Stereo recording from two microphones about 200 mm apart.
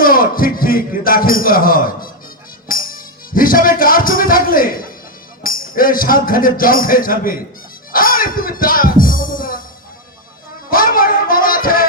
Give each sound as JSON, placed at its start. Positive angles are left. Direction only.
{"t": 0.0, "sound": "speech", "side_deg": 45}
{"t": 2.6, "sound": "music", "side_deg": 45}
{"t": 5.4, "sound": "speech", "side_deg": 45}
{"t": 7.9, "sound": "music", "side_deg": 45}
{"t": 10.7, "sound": "music", "side_deg": 45}